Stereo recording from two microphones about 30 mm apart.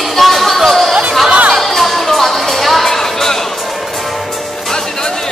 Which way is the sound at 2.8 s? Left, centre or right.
Centre.